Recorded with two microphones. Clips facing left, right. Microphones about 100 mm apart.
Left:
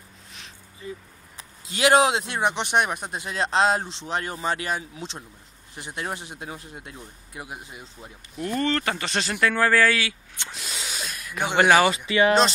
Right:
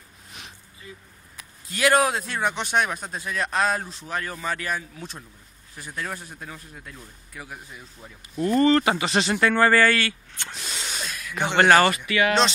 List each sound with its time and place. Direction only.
1.3 s speech: 25° left (ahead or behind)
3.3 s speech: 25° left (ahead or behind)
8.5 s speech: 10° right (ahead or behind)
10.5 s a sound: centre (ahead or behind)
12.1 s speech: 25° left (ahead or behind)